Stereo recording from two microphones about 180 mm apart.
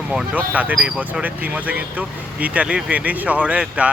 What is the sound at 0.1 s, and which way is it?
Speech, 10° right (ahead or behind).